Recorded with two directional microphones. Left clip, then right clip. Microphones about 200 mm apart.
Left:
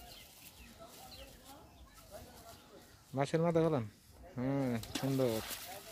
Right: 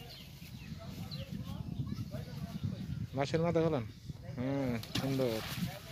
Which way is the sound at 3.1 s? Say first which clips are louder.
Even; 10° left (ahead or behind).